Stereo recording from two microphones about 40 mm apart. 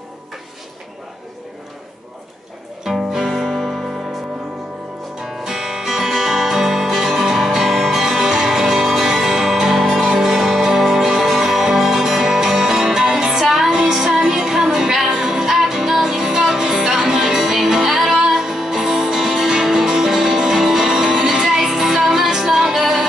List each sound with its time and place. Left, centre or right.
2.8 s music: centre
3.3 s music: centre
5.2 s music: centre
13.7 s music: centre
15.5 s music: centre